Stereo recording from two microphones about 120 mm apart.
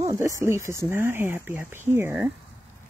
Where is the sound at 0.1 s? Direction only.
25° right (ahead or behind).